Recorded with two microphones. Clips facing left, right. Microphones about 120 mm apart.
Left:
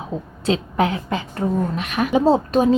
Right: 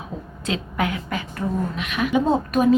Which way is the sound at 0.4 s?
30° left (ahead or behind).